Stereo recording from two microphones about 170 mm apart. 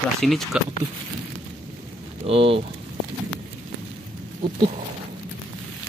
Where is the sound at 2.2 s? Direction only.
35° right (ahead or behind).